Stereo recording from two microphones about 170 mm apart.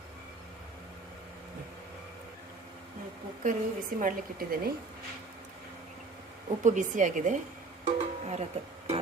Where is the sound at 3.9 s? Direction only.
55° right (ahead or behind).